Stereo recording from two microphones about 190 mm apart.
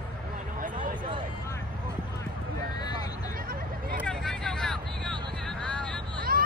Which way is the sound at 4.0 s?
5° left (ahead or behind).